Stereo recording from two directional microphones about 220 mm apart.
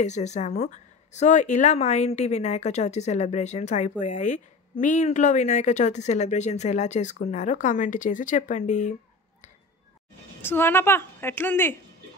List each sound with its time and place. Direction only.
0.0 s speech: 30° left (ahead or behind)
10.4 s a woman's voice: 10° left (ahead or behind)